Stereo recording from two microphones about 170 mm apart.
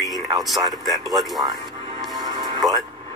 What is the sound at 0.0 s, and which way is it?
Speech, centre (ahead or behind).